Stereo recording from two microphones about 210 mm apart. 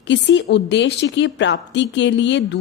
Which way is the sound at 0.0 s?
60° left (ahead or behind).